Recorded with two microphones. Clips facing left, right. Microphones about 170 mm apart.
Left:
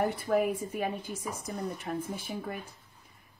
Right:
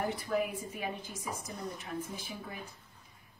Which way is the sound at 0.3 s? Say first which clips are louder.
Left 6 dB; 55° left (ahead or behind).